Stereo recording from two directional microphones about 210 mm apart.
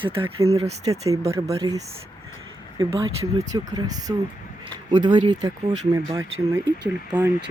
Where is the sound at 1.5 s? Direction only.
25° right (ahead or behind).